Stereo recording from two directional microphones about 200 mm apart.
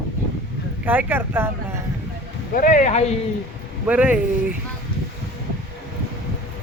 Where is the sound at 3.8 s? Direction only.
5° right (ahead or behind).